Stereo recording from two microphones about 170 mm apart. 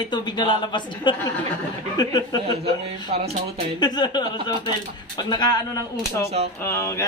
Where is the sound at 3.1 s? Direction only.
35° right (ahead or behind).